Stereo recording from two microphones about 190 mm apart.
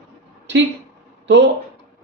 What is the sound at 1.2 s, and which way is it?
Speech, 65° right (ahead or behind).